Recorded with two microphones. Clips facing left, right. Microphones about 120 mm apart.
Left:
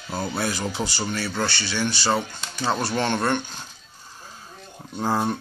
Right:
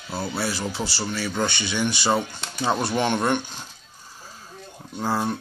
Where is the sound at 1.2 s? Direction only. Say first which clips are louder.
Right 1 dB; 15° right (ahead or behind).